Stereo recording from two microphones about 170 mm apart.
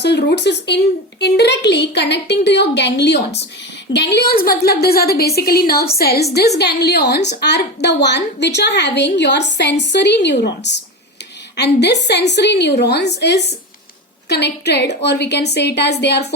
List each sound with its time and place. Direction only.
0.0 s a woman's voice: 80° left
3.9 s a woman's voice: 70° left (ahead or behind)